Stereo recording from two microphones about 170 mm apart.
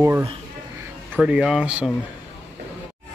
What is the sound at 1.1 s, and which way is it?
Speech, 5° right (ahead or behind).